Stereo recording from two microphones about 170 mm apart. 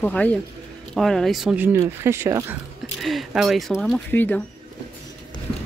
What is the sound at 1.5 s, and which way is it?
Speech, 15° right (ahead or behind).